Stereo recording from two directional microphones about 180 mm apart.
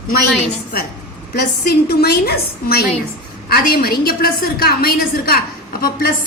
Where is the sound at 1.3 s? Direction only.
60° left (ahead or behind).